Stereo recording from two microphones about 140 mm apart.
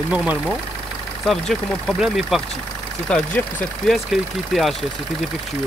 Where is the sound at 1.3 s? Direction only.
Centre (ahead or behind).